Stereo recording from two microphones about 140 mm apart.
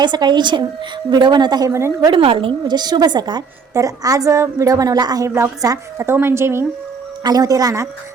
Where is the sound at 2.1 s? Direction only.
40° right (ahead or behind).